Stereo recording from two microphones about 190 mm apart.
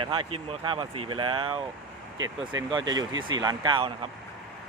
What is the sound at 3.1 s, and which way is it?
Speech, 90° right.